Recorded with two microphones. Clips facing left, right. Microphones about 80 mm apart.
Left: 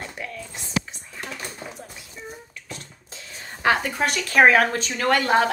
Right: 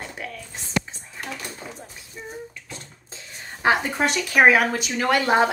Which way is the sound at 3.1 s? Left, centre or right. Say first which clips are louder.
Even; centre.